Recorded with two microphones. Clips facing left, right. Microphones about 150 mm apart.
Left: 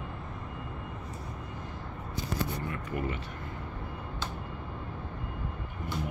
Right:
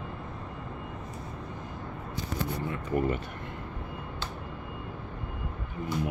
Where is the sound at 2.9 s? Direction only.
40° right (ahead or behind).